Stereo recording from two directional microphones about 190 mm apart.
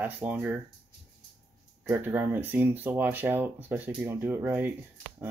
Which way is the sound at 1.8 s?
10° right (ahead or behind).